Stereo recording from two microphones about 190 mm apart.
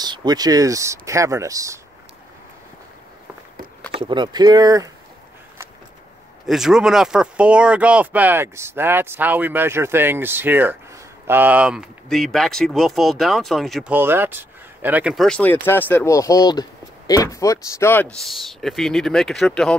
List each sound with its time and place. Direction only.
0.0 s speech: 20° right (ahead or behind)
3.9 s speech: 25° right (ahead or behind)
6.4 s speech: centre (ahead or behind)
13.9 s speech: 10° right (ahead or behind); by 19.8 s 5° left (ahead or behind)